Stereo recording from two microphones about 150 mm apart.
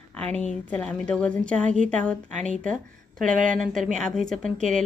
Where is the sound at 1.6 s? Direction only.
55° right (ahead or behind).